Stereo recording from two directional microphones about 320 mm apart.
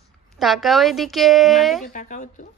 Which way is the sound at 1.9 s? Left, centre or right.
Left.